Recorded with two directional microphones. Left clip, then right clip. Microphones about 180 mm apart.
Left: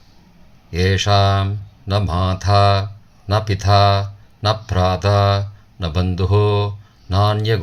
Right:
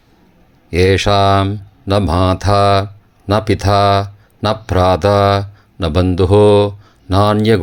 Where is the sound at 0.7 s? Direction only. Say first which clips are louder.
Right 6 dB; 45° right (ahead or behind).